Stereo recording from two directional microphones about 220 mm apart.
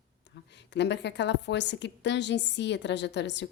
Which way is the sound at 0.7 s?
50° left (ahead or behind).